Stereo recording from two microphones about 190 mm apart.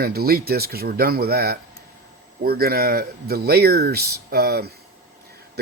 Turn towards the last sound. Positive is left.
turn(degrees=-55)  # may be behind; listen again after turning